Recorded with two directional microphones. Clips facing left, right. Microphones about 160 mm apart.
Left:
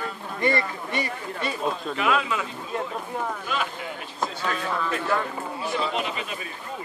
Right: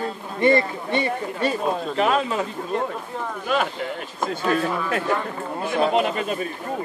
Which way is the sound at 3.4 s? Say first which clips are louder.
Right 6 dB; 50° right (ahead or behind).